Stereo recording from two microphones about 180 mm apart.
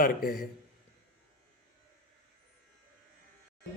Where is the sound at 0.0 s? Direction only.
50° left (ahead or behind).